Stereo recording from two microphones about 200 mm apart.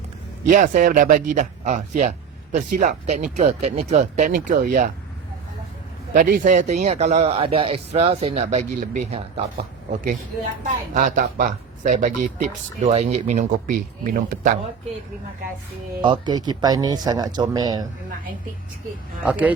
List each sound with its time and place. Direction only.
0.4 s speech: 40° right (ahead or behind)
6.1 s speech: 40° right (ahead or behind)
16.0 s speech: 25° right (ahead or behind)
19.2 s speech: 5° right (ahead or behind)